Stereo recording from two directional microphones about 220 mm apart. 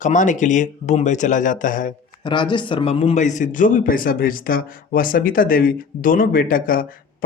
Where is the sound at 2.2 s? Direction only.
20° left (ahead or behind).